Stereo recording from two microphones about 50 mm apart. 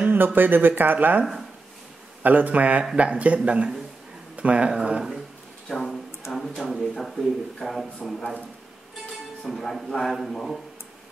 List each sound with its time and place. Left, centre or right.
0.0 s speech: right
2.2 s speech: right
5.7 s a sound: centre
7.0 s a man's voice: centre
9.5 s a man's voice: centre